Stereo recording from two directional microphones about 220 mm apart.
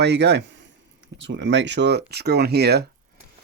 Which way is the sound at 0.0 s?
50° right (ahead or behind).